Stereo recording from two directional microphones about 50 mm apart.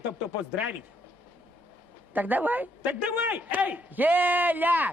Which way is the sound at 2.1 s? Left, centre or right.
Right.